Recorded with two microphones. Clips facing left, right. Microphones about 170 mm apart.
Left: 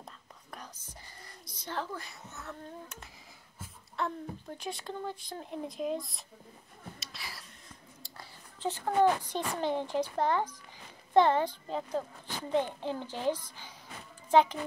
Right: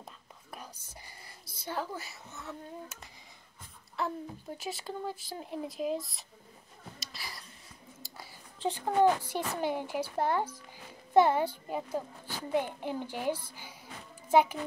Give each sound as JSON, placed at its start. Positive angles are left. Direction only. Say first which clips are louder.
{"t": 1.2, "sound": "a child's voice", "louder": "right 3 dB", "side_deg": -10}
{"t": 7.0, "sound": "a sound", "louder": "right 1 dB", "side_deg": 0}
{"t": 8.2, "sound": "whispering", "louder": "right 2 dB", "side_deg": -15}
{"t": 9.3, "sound": "a child's voice", "louder": "even", "side_deg": -10}